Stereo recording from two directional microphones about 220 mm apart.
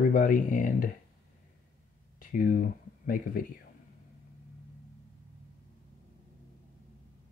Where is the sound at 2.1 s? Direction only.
40° left (ahead or behind).